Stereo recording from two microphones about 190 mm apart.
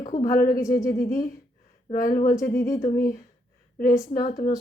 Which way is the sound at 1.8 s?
45° left (ahead or behind).